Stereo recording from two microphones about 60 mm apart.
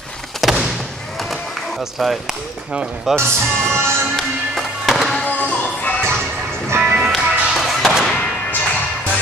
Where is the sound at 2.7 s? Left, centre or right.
Centre.